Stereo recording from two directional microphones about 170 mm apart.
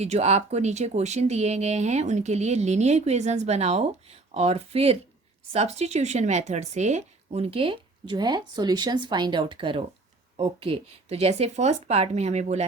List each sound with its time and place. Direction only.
0.0 s speech: 40° right (ahead or behind)